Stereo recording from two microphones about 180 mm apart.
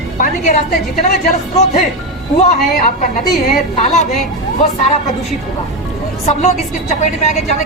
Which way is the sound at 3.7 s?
40° left (ahead or behind).